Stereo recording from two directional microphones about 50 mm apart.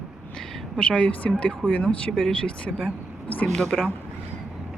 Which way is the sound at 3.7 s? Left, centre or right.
Centre.